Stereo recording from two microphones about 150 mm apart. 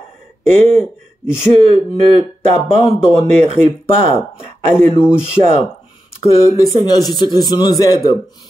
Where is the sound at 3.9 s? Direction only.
40° left (ahead or behind).